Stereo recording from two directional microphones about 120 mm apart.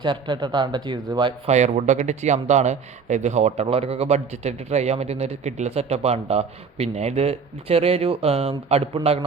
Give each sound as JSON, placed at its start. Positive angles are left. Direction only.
{"t": 0.0, "sound": "a man's voice", "side_deg": -40}
{"t": 1.5, "sound": "speech", "side_deg": -70}